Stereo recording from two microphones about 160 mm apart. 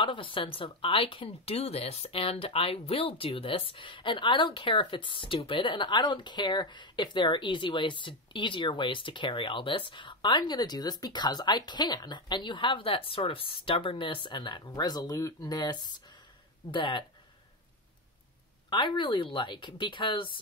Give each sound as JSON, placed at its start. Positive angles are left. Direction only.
{"t": 0.0, "sound": "speech", "side_deg": 30}
{"t": 18.7, "sound": "speech", "side_deg": 30}